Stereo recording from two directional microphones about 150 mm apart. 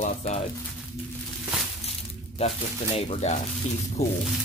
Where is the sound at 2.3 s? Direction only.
45° left (ahead or behind).